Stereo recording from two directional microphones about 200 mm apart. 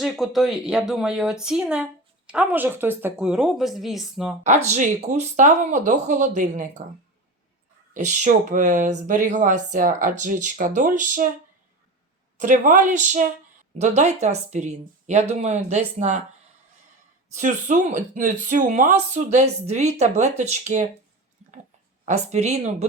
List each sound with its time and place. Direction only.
0.0 s speech: centre (ahead or behind)
4.4 s speech: 35° right (ahead or behind)
7.9 s speech: 35° right (ahead or behind)
12.4 s speech: 40° right (ahead or behind)
17.3 s speech: 40° right (ahead or behind)
22.0 s speech: 35° right (ahead or behind)